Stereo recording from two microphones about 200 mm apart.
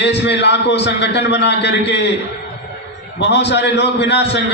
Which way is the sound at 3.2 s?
60° left (ahead or behind).